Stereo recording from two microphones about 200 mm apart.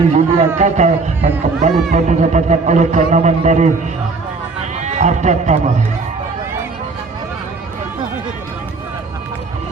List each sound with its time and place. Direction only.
0.1 s speech: 35° right (ahead or behind)
4.9 s speech: 35° right (ahead or behind)